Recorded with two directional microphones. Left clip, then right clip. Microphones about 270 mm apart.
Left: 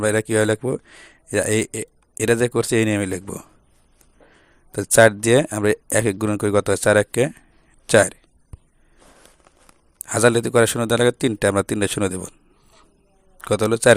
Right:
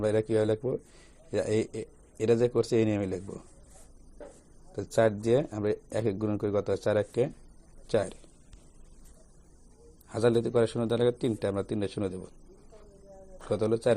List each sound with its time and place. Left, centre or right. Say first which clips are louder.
0.0 s a man's voice: left 8 dB; left
4.7 s a man's voice: left 12 dB; left
10.1 s a man's voice: left 9 dB; left
13.5 s a man's voice: left 11 dB; left